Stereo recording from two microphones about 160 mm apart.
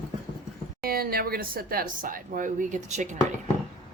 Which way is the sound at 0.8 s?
70° right (ahead or behind).